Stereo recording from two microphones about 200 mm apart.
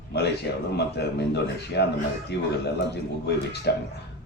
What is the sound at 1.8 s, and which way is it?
Speech, 55° left (ahead or behind).